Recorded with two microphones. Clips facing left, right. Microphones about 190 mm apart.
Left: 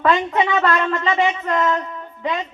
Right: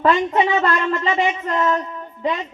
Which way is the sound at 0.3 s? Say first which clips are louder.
Even; 35° right (ahead or behind).